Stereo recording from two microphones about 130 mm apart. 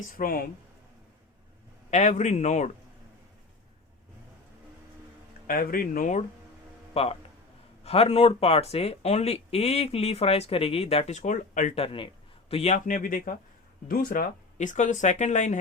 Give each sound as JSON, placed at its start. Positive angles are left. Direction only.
{"t": 0.0, "sound": "speech", "side_deg": 90}
{"t": 1.9, "sound": "speech", "side_deg": 65}
{"t": 5.5, "sound": "speech", "side_deg": 90}
{"t": 6.9, "sound": "speech", "side_deg": 45}
{"t": 11.7, "sound": "a man's voice", "side_deg": 45}